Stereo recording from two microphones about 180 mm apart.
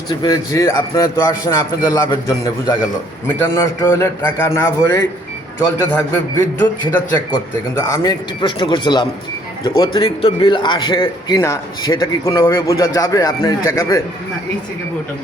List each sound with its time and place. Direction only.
0.1 s a man's voice: 20° left (ahead or behind)
11.3 s a man's voice: 15° left (ahead or behind)